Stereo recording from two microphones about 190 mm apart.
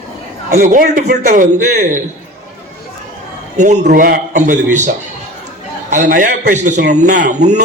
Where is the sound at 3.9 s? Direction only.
50° right (ahead or behind).